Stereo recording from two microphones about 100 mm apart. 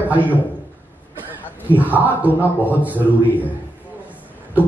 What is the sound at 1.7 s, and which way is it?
A man's voice, 15° right (ahead or behind).